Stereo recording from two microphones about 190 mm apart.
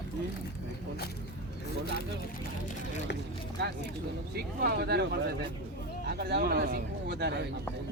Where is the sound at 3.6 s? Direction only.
65° right (ahead or behind).